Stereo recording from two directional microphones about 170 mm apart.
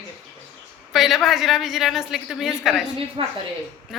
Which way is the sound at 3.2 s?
30° right (ahead or behind).